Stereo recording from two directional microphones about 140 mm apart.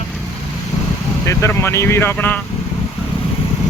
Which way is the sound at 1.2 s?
20° left (ahead or behind).